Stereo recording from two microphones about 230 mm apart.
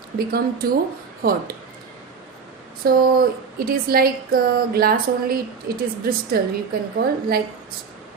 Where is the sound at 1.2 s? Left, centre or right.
Right.